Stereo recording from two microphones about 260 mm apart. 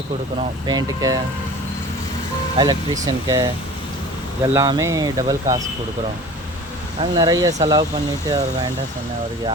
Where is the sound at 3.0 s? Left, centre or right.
Centre.